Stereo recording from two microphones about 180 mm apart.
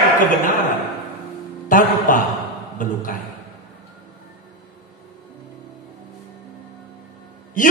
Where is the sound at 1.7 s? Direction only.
45° left (ahead or behind).